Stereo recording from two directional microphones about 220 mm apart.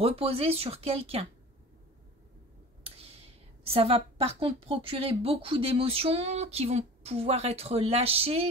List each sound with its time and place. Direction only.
0.0 s a woman's voice: 25° right (ahead or behind)
3.6 s a woman's voice: 25° right (ahead or behind)